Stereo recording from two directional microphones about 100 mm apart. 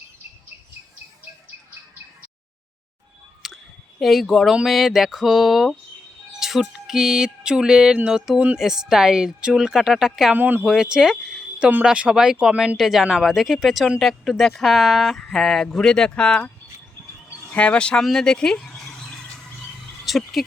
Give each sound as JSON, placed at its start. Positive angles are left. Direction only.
{"t": 3.4, "sound": "clicking", "side_deg": -5}
{"t": 4.0, "sound": "speech", "side_deg": 0}
{"t": 10.3, "sound": "speech", "side_deg": -15}
{"t": 10.7, "sound": "speech", "side_deg": -5}
{"t": 17.5, "sound": "speech", "side_deg": 10}
{"t": 20.1, "sound": "speech", "side_deg": 0}